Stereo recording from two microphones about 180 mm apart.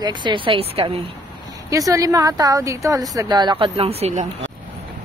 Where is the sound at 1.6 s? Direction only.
20° right (ahead or behind); by 4.2 s 35° right (ahead or behind).